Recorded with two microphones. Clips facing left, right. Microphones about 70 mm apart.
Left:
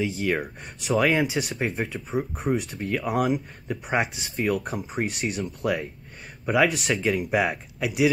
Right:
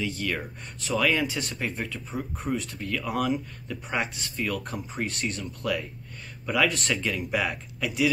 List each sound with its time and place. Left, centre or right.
0.1 s speech: centre
1.2 s speech: centre
5.4 s speech: left